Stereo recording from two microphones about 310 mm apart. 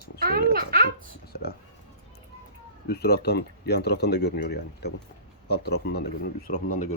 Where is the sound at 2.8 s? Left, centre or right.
Left.